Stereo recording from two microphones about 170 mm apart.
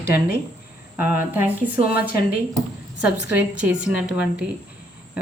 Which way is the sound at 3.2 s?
10° right (ahead or behind).